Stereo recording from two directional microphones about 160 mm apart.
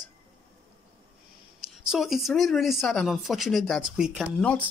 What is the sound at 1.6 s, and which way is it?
Speech, centre (ahead or behind).